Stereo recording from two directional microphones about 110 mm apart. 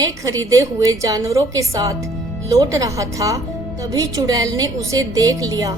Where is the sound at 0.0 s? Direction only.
30° right (ahead or behind).